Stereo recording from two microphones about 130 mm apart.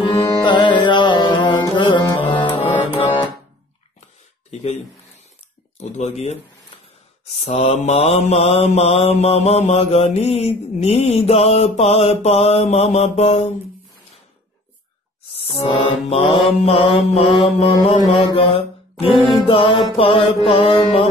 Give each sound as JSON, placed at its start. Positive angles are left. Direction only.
{"t": 0.0, "sound": "music", "side_deg": 35}
{"t": 5.8, "sound": "speech", "side_deg": 60}
{"t": 7.2, "sound": "mantra", "side_deg": 55}
{"t": 15.3, "sound": "mantra", "side_deg": 50}